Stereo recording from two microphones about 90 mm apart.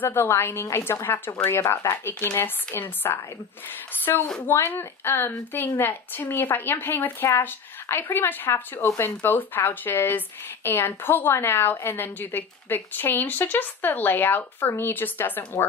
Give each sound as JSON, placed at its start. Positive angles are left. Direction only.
{"t": 0.0, "sound": "speech", "side_deg": 25}
{"t": 1.6, "sound": "speech", "side_deg": 35}